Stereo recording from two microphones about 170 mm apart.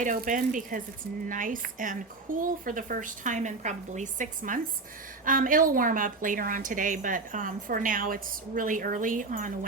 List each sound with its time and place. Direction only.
0.0 s a woman's voice: 50° right (ahead or behind)